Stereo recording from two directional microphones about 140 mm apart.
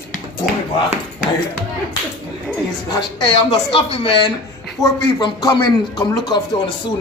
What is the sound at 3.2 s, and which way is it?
A man's voice, 40° left (ahead or behind).